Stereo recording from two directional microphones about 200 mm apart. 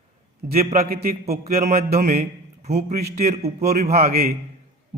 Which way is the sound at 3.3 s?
35° right (ahead or behind).